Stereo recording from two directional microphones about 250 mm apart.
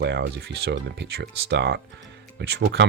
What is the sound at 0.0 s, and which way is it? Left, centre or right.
Speech, right.